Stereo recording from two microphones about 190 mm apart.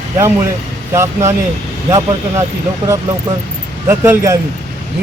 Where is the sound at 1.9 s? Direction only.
20° right (ahead or behind).